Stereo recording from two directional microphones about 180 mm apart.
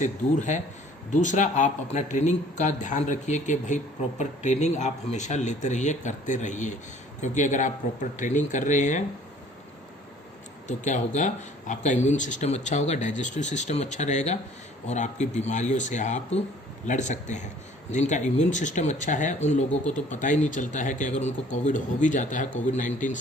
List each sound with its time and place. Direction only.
0.0 s a man's voice: 40° left (ahead or behind)
10.7 s a man's voice: 45° left (ahead or behind)